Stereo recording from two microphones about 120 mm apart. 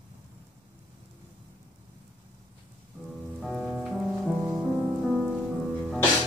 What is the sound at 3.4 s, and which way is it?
Music, centre (ahead or behind).